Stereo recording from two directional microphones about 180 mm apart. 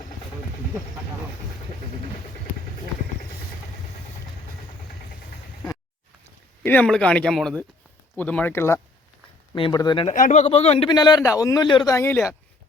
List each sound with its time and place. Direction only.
6.6 s speech: 5° left (ahead or behind)
9.6 s speech: 25° left (ahead or behind)
10.1 s speech: 45° left (ahead or behind)
10.8 s speech: 25° left (ahead or behind)